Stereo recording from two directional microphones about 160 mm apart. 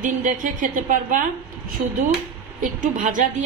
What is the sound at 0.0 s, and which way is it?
A woman's voice, 55° right (ahead or behind).